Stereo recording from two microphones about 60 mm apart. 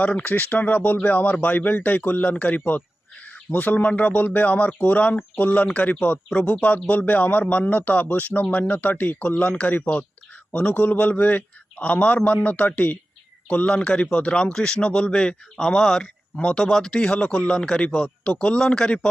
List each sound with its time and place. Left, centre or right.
0.0 s speech: left